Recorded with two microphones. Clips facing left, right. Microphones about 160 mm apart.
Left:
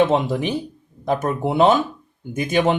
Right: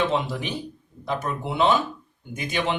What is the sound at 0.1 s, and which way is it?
Speech, 50° left (ahead or behind).